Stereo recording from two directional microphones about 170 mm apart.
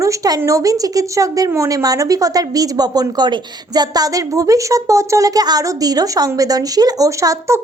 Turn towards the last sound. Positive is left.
turn(degrees=-15)  # may be behind; listen again after turning